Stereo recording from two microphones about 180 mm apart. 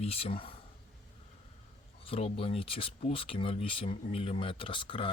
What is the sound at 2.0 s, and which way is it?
Speech, 30° left (ahead or behind).